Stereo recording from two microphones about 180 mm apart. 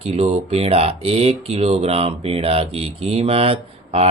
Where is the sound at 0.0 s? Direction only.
35° right (ahead or behind).